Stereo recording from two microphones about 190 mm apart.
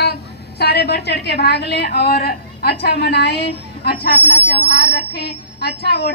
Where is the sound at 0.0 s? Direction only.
60° left (ahead or behind).